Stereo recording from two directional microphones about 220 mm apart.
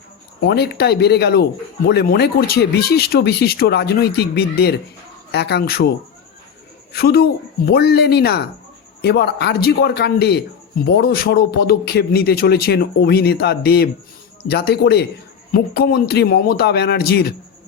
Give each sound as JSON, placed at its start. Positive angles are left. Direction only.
{"t": 0.4, "sound": "a man's voice", "side_deg": 50}
{"t": 6.9, "sound": "a man's voice", "side_deg": 45}